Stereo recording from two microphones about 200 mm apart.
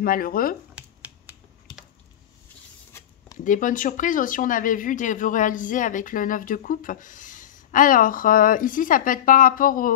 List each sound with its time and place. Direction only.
0.0 s speech: 45° left (ahead or behind)
3.4 s speech: 40° left (ahead or behind)